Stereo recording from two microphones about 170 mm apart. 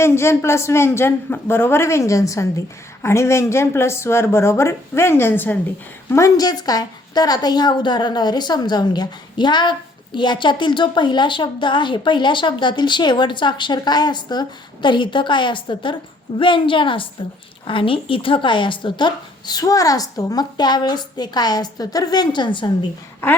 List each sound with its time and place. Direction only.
0.0 s a man's voice: 15° left (ahead or behind)